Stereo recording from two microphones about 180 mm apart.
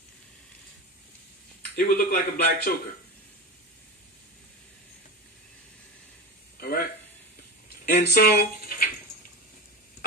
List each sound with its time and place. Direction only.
1.8 s speech: 55° left (ahead or behind)
7.8 s speech: 60° left (ahead or behind)